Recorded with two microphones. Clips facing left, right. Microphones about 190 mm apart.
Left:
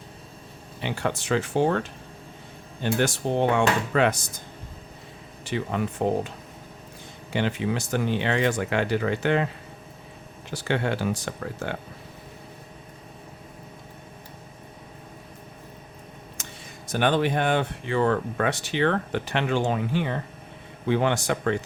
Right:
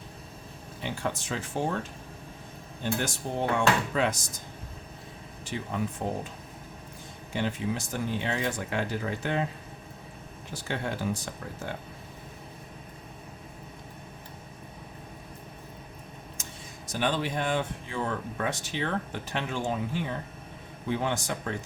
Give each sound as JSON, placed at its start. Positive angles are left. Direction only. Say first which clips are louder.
{"t": 0.8, "sound": "speech", "louder": "left 4 dB", "side_deg": 75}
{"t": 5.5, "sound": "speech", "louder": "left 5 dB", "side_deg": 75}
{"t": 7.3, "sound": "speech", "louder": "left 4 dB", "side_deg": 75}
{"t": 10.5, "sound": "speech", "louder": "left 7 dB", "side_deg": 75}
{"t": 16.4, "sound": "a sound", "louder": "left 2 dB", "side_deg": 70}
{"t": 16.9, "sound": "speech", "louder": "left 6 dB", "side_deg": 60}